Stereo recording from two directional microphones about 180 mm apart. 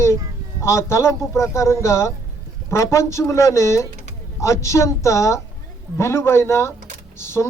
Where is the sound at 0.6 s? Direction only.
15° left (ahead or behind).